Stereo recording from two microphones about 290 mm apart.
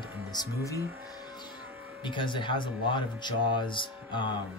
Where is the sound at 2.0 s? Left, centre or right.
Centre.